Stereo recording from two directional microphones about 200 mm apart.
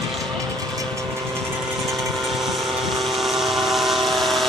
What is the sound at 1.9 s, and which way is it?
Vehicle, centre (ahead or behind).